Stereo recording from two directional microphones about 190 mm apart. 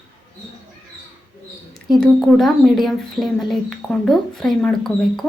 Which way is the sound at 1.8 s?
Centre (ahead or behind).